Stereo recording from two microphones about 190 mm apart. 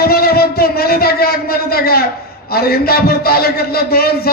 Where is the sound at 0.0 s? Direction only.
55° left (ahead or behind).